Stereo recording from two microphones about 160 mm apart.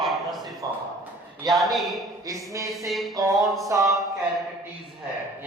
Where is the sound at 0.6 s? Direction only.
25° right (ahead or behind).